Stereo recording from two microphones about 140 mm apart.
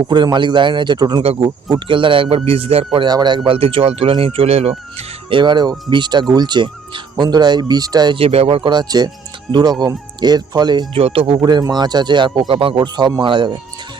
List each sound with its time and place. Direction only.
0.1 s a man's voice: 35° right (ahead or behind)
8.2 s a man's voice: 45° right (ahead or behind)
11.0 s a man's voice: 40° right (ahead or behind)